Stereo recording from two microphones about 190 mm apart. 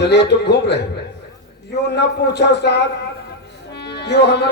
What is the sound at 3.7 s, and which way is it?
Music, 60° left (ahead or behind).